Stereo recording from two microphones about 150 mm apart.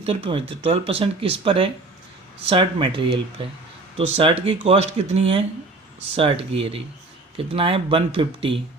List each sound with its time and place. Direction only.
0.0 s speech: 40° right (ahead or behind)